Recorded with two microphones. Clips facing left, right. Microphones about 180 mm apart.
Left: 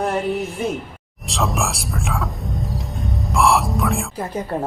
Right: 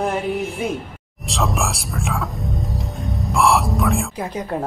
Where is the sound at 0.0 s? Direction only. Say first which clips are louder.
Even; centre (ahead or behind).